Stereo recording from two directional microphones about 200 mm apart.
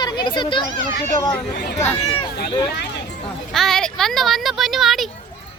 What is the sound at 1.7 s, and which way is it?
Speech, 10° left (ahead or behind).